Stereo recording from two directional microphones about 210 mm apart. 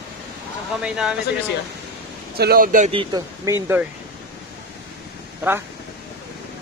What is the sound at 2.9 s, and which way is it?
Speech, 20° right (ahead or behind).